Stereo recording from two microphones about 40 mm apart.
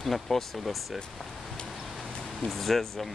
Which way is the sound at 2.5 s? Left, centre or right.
Centre.